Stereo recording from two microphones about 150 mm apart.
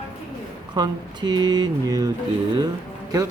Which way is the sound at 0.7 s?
30° right (ahead or behind).